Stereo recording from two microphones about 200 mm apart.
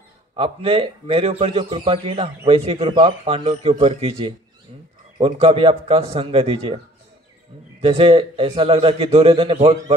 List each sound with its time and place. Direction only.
0.4 s a man's voice: 30° right (ahead or behind)
7.8 s a man's voice: 30° right (ahead or behind)